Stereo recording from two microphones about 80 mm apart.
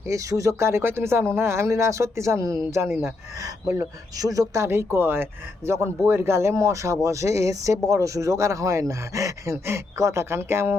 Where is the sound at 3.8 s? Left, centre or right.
Right.